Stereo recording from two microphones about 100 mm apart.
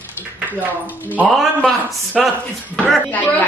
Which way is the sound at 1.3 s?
5° left (ahead or behind).